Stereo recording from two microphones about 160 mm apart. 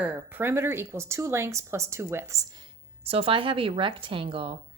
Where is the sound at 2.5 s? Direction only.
35° right (ahead or behind).